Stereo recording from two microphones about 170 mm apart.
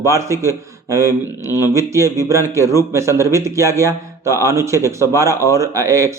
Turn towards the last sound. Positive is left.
turn(degrees=-20)  # may be behind; listen again after turning